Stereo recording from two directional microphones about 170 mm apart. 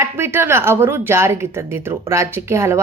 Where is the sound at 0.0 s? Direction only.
15° right (ahead or behind).